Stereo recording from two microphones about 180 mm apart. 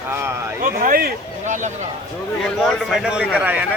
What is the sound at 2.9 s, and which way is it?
Speech, 5° right (ahead or behind).